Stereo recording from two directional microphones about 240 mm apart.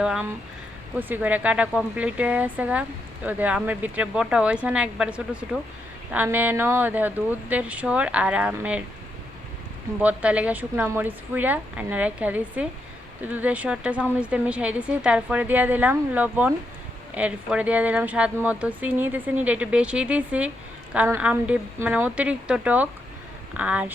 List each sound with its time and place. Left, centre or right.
0.0 s a woman's voice: centre
10.0 s a woman's voice: centre